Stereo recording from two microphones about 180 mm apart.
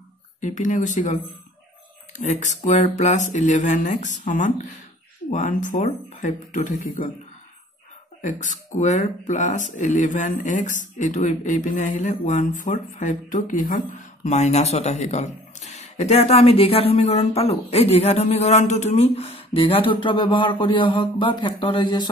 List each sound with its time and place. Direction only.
0.4 s speech: 45° left (ahead or behind)
2.1 s speech: 40° left (ahead or behind)
8.2 s speech: 45° left (ahead or behind); by 22.1 s 25° left (ahead or behind)